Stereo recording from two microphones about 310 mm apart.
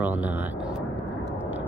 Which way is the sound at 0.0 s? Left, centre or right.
Centre.